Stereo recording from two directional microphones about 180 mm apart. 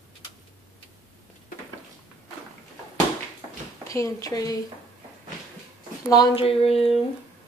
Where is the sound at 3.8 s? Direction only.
15° left (ahead or behind).